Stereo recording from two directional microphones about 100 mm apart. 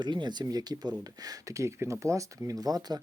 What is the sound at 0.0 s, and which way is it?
Speech, 50° right (ahead or behind).